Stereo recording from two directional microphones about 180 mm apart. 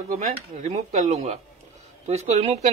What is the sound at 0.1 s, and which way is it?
Speech, 35° right (ahead or behind).